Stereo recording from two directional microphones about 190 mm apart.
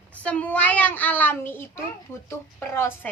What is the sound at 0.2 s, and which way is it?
A woman's voice, 5° left (ahead or behind).